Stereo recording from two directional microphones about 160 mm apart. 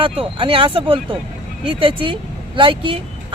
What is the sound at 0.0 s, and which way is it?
Speech, 35° right (ahead or behind).